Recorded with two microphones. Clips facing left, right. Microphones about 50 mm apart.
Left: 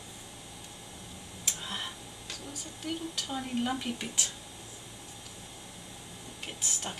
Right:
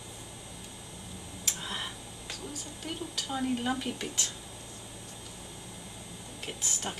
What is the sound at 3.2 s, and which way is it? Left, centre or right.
Speech, centre.